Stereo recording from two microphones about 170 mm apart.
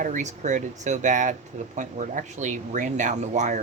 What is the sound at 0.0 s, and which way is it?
Speech, 45° right (ahead or behind).